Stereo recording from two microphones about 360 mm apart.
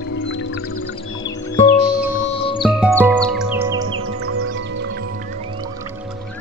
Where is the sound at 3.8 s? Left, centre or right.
Right.